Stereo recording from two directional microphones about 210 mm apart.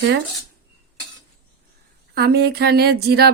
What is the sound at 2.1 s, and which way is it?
Speech, 50° right (ahead or behind).